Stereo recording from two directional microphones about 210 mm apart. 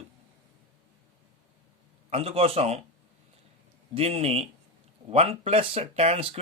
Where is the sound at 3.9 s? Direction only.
30° right (ahead or behind).